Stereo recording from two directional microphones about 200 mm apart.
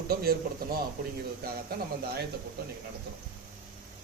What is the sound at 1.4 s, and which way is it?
Speech, 50° right (ahead or behind).